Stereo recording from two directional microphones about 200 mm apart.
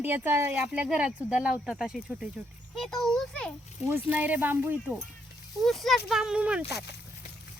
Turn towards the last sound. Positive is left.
turn(degrees=-5)  # may be behind; listen again after turning